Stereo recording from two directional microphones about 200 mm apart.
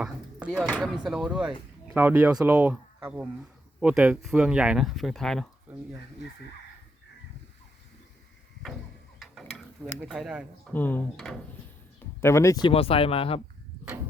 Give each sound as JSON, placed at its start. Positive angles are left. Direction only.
{"t": 0.4, "sound": "speech", "side_deg": 5}
{"t": 9.1, "sound": "tick-tock", "side_deg": 0}
{"t": 10.0, "sound": "speech", "side_deg": 0}
{"t": 10.7, "sound": "speech", "side_deg": 10}